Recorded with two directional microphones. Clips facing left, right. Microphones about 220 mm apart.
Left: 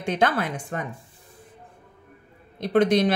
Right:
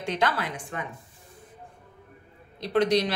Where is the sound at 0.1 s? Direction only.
50° left (ahead or behind).